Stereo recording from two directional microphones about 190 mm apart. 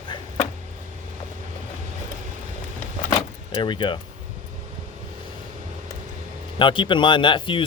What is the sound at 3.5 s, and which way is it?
Speech, 25° left (ahead or behind).